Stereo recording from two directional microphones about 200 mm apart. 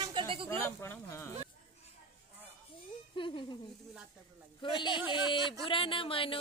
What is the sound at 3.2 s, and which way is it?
Speech, 25° left (ahead or behind).